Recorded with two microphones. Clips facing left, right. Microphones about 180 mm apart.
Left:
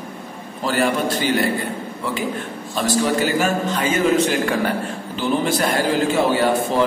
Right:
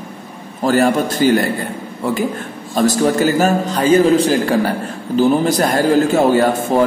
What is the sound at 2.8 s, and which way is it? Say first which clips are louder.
A man's voice: right 5 dB; 45° right (ahead or behind).